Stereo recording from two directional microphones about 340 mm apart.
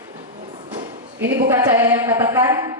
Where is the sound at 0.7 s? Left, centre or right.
Right.